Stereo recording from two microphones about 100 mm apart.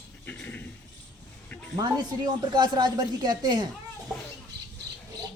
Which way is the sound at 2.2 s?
45° right (ahead or behind).